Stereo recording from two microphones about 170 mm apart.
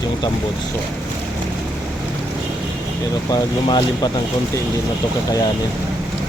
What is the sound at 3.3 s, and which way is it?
Speech, 25° left (ahead or behind).